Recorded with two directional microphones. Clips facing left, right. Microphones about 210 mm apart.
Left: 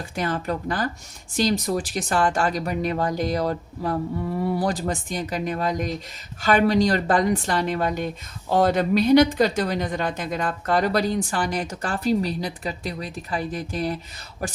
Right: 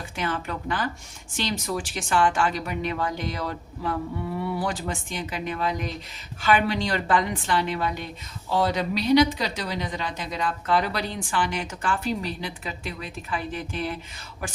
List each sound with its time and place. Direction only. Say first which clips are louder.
0.2 s a woman's voice: left 4 dB; 40° left (ahead or behind)